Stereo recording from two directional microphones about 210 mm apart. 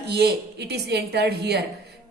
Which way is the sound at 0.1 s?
50° right (ahead or behind).